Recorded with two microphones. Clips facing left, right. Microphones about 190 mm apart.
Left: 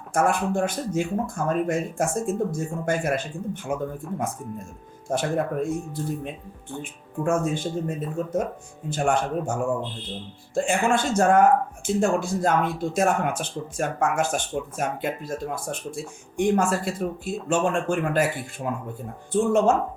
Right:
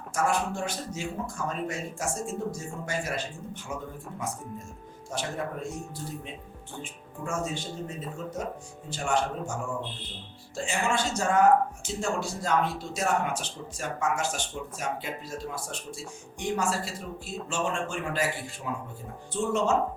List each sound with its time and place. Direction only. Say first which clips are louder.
0.1 s speech: left 5 dB; 55° left (ahead or behind)
5.0 s speech: left 8 dB; 55° left (ahead or behind)